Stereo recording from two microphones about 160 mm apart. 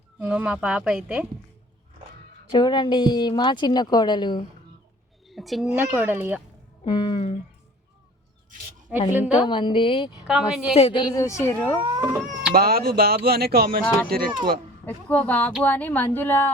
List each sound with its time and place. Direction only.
0.2 s speech: 10° right (ahead or behind)
2.5 s a woman's voice: 30° left (ahead or behind)
5.3 s a woman's voice: centre (ahead or behind)
5.6 s speech: 10° right (ahead or behind)
6.8 s a woman's voice: 30° left (ahead or behind)
9.1 s a woman's voice: 5° right (ahead or behind)
9.5 s speech: 30° left (ahead or behind)
10.2 s a woman's voice: 5° right (ahead or behind)
10.8 s a woman's voice: 35° left (ahead or behind); by 11.8 s 10° left (ahead or behind)
11.9 s speech: 10° right (ahead or behind)
12.5 s speech: 75° right (ahead or behind)
14.8 s speech: 10° left (ahead or behind)